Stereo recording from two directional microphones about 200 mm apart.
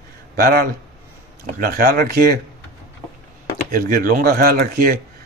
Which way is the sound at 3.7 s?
45° right (ahead or behind).